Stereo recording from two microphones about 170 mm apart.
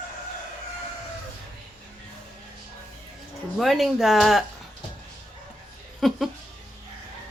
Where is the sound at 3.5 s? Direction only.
Centre (ahead or behind).